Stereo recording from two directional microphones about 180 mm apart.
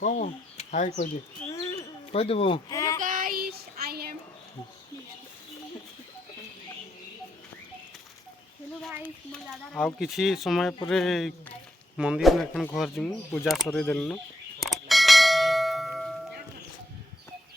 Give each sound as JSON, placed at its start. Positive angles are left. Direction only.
{"t": 0.0, "sound": "speech", "side_deg": 40}
{"t": 1.5, "sound": "a sound", "side_deg": 20}
{"t": 2.1, "sound": "speech", "side_deg": 30}
{"t": 2.6, "sound": "child singing", "side_deg": 20}
{"t": 3.0, "sound": "child singing", "side_deg": -50}
{"t": 9.0, "sound": "speech", "side_deg": 0}
{"t": 14.6, "sound": "bell", "side_deg": 0}